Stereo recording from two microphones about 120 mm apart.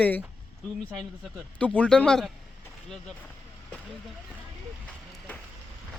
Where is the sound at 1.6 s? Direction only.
10° left (ahead or behind).